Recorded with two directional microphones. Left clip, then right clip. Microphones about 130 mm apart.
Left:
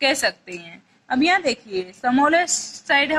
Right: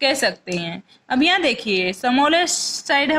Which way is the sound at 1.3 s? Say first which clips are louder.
Right 2 dB; 40° right (ahead or behind).